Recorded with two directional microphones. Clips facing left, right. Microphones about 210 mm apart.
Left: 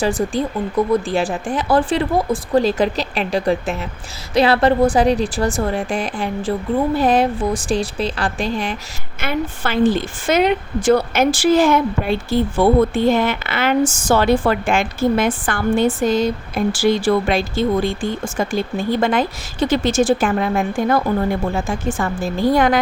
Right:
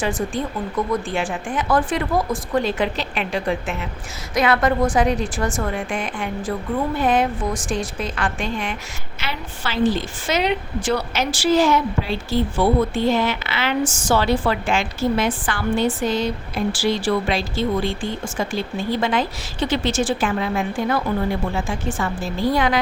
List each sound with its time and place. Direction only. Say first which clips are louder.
0.0 s a woman's voice: left 4 dB; 35° left (ahead or behind)
9.2 s a woman's voice: left 8 dB; 55° left (ahead or behind)